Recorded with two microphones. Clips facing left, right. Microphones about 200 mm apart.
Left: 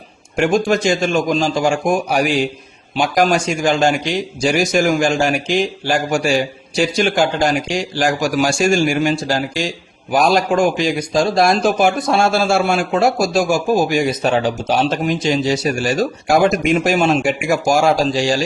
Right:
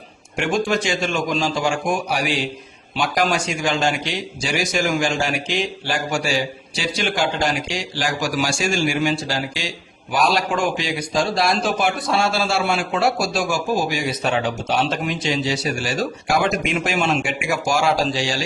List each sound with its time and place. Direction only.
0.3 s a man's voice: 45° left (ahead or behind)